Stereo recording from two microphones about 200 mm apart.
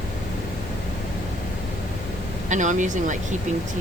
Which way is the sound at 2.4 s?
40° right (ahead or behind).